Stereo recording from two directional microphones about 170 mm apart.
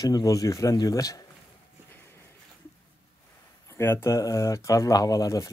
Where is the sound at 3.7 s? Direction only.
15° left (ahead or behind).